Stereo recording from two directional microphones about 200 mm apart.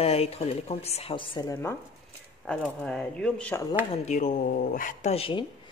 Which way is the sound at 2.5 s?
5° left (ahead or behind).